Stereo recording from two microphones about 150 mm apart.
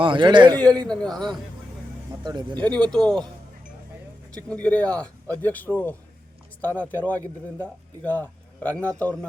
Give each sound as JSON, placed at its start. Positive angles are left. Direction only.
{"t": 0.0, "sound": "a man's voice", "side_deg": -30}
{"t": 0.9, "sound": "a man's voice", "side_deg": 5}
{"t": 2.2, "sound": "speech", "side_deg": -30}
{"t": 2.6, "sound": "a man's voice", "side_deg": 10}
{"t": 4.4, "sound": "speech", "side_deg": 10}